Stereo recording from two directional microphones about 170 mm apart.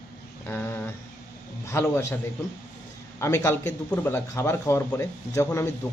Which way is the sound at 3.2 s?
15° left (ahead or behind).